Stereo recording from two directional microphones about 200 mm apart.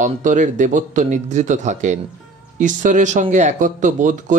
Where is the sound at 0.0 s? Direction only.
40° right (ahead or behind).